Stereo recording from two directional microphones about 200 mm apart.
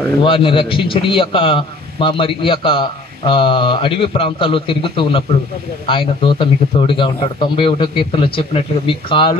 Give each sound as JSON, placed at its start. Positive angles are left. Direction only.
{"t": 0.2, "sound": "a man's voice", "side_deg": 25}